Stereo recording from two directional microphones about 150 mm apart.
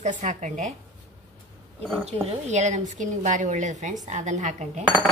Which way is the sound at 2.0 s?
45° right (ahead or behind).